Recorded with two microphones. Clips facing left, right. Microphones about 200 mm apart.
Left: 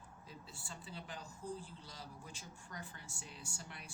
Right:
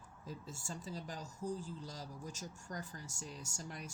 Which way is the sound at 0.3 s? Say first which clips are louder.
Right 7 dB; 45° right (ahead or behind).